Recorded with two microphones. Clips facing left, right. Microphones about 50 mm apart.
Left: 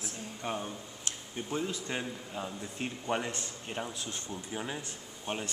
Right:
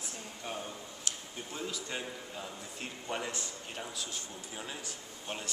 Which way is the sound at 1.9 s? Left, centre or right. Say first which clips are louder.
Left 3 dB; centre.